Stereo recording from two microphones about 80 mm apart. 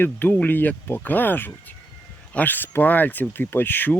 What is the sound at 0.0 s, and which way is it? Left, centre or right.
Speech, left.